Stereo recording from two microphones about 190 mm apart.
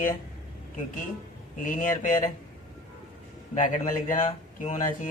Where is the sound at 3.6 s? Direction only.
45° left (ahead or behind).